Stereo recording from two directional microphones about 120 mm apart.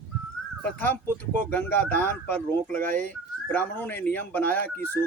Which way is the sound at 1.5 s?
15° left (ahead or behind).